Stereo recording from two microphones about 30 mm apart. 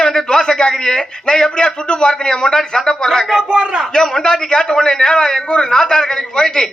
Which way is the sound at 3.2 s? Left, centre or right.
Centre.